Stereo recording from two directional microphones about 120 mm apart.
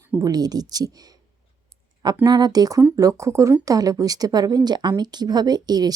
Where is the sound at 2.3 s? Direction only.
35° right (ahead or behind).